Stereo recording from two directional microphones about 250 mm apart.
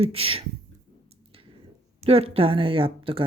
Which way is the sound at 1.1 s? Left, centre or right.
Right.